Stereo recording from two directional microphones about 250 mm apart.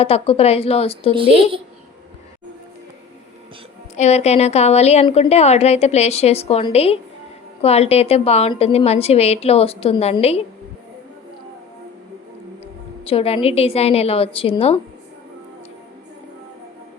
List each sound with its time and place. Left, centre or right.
0.0 s a woman's voice: left
3.9 s a woman's voice: left
13.1 s a woman's voice: left